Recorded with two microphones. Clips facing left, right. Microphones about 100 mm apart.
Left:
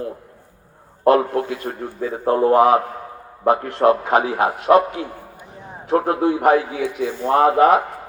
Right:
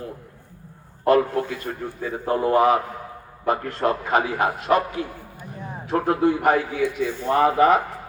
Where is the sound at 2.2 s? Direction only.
60° left (ahead or behind).